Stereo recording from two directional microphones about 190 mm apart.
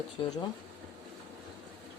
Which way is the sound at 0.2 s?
25° left (ahead or behind).